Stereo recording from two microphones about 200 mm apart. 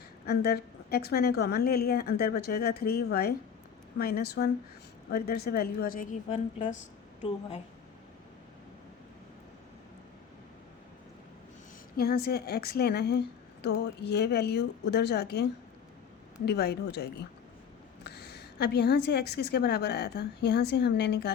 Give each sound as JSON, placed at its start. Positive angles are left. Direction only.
{"t": 0.3, "sound": "a woman's voice", "side_deg": 50}
{"t": 11.9, "sound": "a woman's voice", "side_deg": 50}
{"t": 16.5, "sound": "a woman's voice", "side_deg": 55}